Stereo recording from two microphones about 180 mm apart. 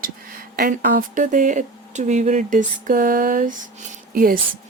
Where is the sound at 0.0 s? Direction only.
55° right (ahead or behind).